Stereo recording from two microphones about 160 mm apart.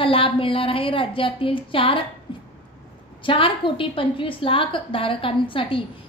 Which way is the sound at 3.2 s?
30° left (ahead or behind).